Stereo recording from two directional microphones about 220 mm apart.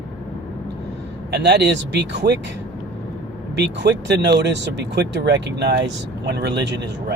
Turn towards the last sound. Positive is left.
turn(degrees=-50)  # may be behind; listen again after turning